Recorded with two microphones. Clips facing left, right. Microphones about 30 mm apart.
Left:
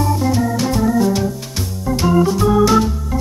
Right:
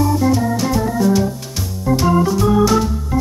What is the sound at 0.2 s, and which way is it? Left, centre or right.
Organ, centre.